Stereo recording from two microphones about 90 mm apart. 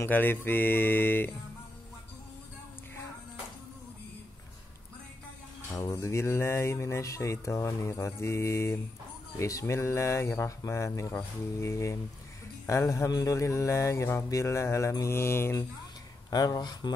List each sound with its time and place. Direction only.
0.0 s speech: 25° left (ahead or behind)
5.9 s speech: 35° left (ahead or behind)
16.3 s speech: 50° left (ahead or behind)